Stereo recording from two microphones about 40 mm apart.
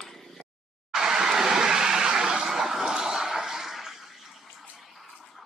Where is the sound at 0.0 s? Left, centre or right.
Centre.